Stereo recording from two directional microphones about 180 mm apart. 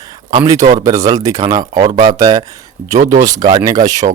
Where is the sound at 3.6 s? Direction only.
20° right (ahead or behind).